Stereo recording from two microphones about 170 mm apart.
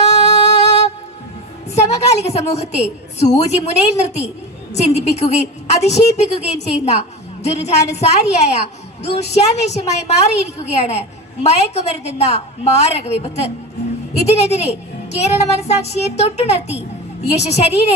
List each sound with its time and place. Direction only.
0.0 s music: 40° left (ahead or behind)
1.7 s a woman's voice: 40° left (ahead or behind)